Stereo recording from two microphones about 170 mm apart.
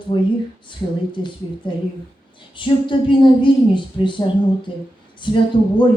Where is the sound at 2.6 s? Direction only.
30° left (ahead or behind).